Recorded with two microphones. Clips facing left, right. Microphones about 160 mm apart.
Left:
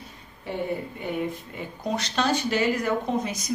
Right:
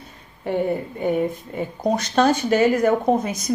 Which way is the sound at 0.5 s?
55° right (ahead or behind).